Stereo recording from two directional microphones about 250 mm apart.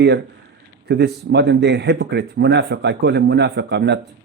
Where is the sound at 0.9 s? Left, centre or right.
Right.